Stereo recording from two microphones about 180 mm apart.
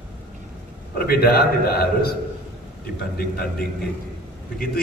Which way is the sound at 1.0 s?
60° left (ahead or behind).